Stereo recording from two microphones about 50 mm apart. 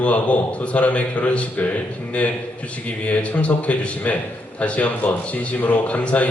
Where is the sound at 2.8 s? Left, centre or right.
Left.